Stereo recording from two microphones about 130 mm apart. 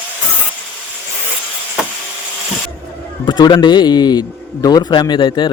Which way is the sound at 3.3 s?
35° left (ahead or behind).